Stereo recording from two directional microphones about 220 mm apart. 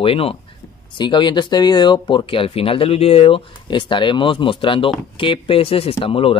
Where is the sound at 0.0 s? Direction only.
25° left (ahead or behind).